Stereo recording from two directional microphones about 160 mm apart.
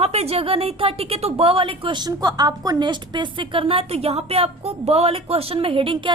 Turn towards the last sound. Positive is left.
turn(degrees=-35)  # may be behind; listen again after turning